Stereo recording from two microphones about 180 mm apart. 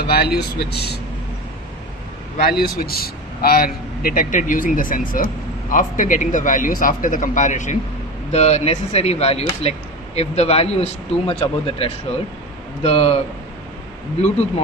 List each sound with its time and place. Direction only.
0.0 s speech: 60° left (ahead or behind)
2.4 s a man's voice: 60° left (ahead or behind); by 13.2 s 35° left (ahead or behind)